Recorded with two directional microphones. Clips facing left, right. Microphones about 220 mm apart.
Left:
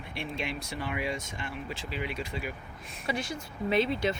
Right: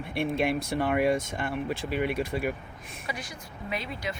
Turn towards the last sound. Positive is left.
turn(degrees=25)  # may be behind; listen again after turning